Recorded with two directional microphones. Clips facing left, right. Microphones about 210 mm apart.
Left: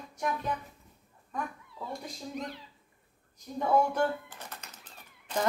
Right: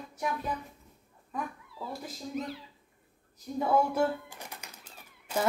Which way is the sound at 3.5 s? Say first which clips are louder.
Even; 5° right (ahead or behind).